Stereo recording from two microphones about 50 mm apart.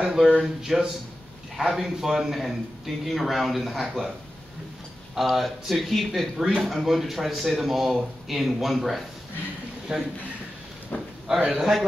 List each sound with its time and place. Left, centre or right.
0.0 s a man's voice: centre
5.1 s a man's voice: centre
9.9 s a man's voice: centre
10.9 s speech: left
11.2 s a man's voice: centre